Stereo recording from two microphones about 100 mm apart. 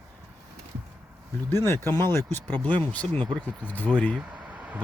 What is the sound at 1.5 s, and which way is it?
Speech, 25° left (ahead or behind).